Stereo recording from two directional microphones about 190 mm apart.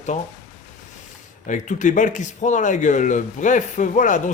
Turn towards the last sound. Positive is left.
turn(degrees=40)  # may be behind; listen again after turning